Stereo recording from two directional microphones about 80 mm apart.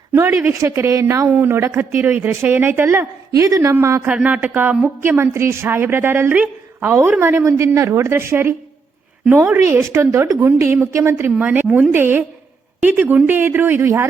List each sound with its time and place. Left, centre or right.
0.1 s a woman's voice: right
1.4 s a woman's voice: right
3.4 s a woman's voice: right
4.0 s a woman's voice: centre